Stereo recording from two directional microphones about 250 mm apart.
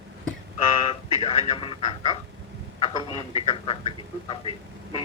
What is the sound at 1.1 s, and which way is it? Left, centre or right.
Speech, left.